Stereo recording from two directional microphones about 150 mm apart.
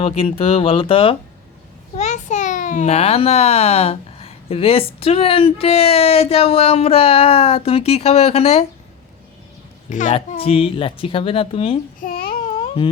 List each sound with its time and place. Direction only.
0.0 s a child's voice: 40° left (ahead or behind)
2.0 s a child's voice: 55° left (ahead or behind)
10.1 s a child's voice: 40° left (ahead or behind)
12.0 s a sound: 75° left (ahead or behind)
12.3 s baby cry: 35° left (ahead or behind)